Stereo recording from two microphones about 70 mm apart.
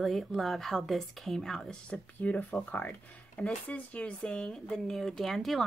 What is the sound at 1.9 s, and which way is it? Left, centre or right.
A woman's voice, centre.